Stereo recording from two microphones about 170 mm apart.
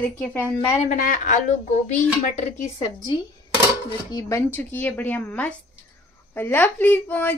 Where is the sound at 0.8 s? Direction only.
50° left (ahead or behind).